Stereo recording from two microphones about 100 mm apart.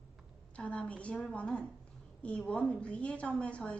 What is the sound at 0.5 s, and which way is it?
A woman's voice, 10° left (ahead or behind).